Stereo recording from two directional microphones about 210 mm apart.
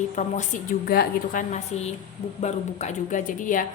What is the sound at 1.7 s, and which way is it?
Speech, 30° left (ahead or behind).